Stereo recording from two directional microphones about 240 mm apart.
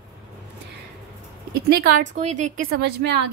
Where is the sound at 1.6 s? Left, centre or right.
Right.